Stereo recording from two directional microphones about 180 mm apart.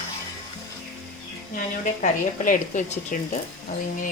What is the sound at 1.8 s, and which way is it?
A woman's voice, 45° left (ahead or behind).